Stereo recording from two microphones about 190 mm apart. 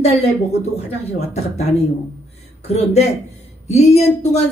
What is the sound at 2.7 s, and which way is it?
A woman's voice, 35° left (ahead or behind).